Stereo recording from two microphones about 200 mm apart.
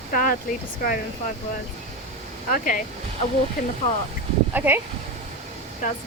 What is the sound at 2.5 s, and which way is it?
Speech, 40° left (ahead or behind).